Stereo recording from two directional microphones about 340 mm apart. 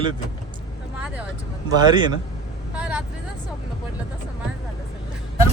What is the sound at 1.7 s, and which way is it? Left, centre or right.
Speech, centre.